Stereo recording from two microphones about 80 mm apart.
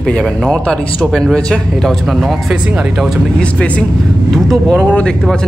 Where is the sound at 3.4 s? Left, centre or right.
Centre.